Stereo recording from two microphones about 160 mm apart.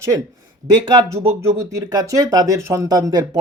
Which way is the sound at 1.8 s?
25° right (ahead or behind).